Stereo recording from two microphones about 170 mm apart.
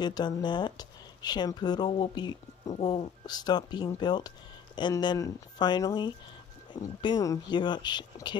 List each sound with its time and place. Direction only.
0.0 s speech: 25° left (ahead or behind)